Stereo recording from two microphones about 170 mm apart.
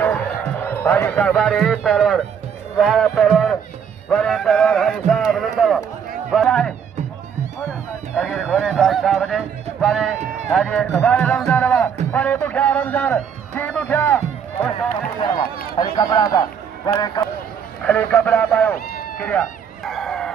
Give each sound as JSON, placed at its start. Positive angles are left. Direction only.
{"t": 0.0, "sound": "a man's voice", "side_deg": 10}
{"t": 8.1, "sound": "a man's voice", "side_deg": 0}
{"t": 15.7, "sound": "speech", "side_deg": 25}
{"t": 17.8, "sound": "a man's voice", "side_deg": 10}
{"t": 19.8, "sound": "fowl", "side_deg": 5}